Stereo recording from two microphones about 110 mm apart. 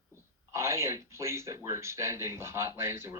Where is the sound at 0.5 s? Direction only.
25° right (ahead or behind).